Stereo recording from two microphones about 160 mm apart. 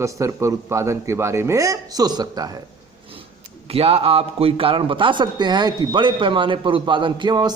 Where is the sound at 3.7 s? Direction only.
40° right (ahead or behind).